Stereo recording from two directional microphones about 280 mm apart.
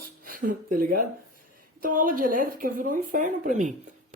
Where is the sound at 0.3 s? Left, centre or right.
Right.